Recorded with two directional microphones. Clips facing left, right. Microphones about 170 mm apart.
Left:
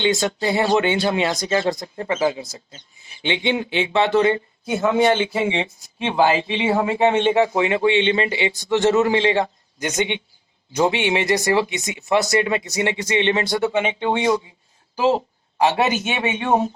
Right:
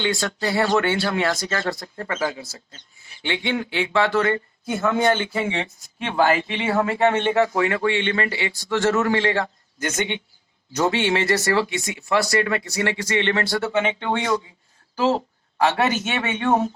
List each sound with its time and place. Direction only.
0.0 s speech: 20° left (ahead or behind)